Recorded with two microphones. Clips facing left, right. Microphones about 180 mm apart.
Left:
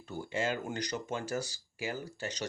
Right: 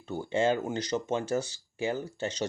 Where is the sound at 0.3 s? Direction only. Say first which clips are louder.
Right 7 dB; 25° right (ahead or behind).